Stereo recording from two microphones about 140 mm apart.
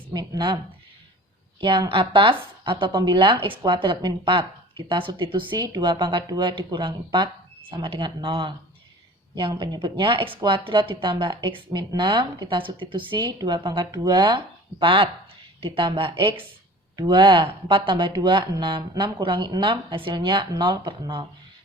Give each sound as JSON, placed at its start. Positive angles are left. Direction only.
{"t": 0.1, "sound": "speech", "side_deg": -30}
{"t": 1.6, "sound": "speech", "side_deg": -35}